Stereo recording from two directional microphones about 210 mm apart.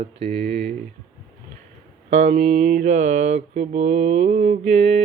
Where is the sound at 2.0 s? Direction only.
30° right (ahead or behind).